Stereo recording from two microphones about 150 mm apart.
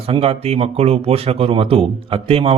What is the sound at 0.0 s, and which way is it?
A man's voice, 40° right (ahead or behind).